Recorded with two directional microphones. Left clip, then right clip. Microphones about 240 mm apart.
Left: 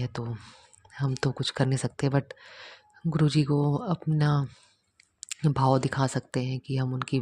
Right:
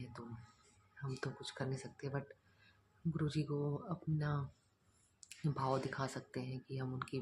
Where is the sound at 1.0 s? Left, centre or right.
Left.